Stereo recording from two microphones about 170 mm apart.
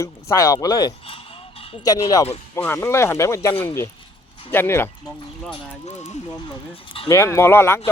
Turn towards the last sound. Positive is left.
turn(degrees=15)  # may be behind; listen again after turning